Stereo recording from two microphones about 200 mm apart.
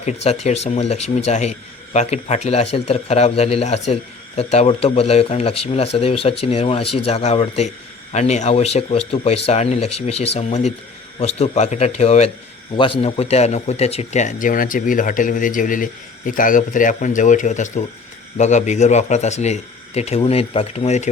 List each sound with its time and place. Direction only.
0.0 s a man's voice: 30° left (ahead or behind)